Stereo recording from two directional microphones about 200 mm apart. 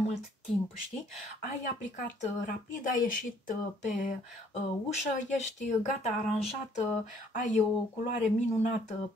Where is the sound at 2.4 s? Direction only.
40° left (ahead or behind).